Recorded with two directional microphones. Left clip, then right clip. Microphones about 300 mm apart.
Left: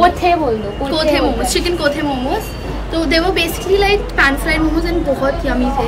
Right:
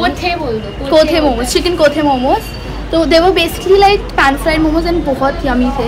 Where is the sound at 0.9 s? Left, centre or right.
Centre.